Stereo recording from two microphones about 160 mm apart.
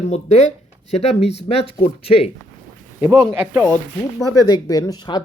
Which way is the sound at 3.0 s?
20° right (ahead or behind).